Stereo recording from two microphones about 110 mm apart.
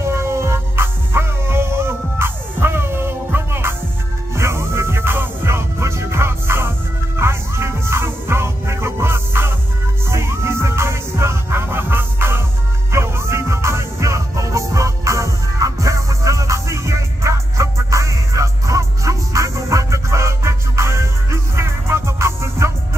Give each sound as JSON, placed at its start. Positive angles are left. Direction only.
{"t": 0.0, "sound": "music", "side_deg": -25}